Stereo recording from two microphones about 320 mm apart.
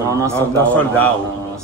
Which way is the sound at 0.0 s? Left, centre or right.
Centre.